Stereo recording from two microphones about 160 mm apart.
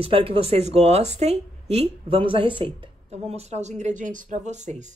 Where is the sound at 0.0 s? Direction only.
35° right (ahead or behind).